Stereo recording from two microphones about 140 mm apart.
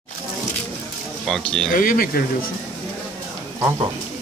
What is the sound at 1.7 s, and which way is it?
Speech, 80° left.